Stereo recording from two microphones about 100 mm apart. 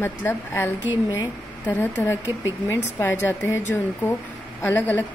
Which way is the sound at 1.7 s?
15° left (ahead or behind).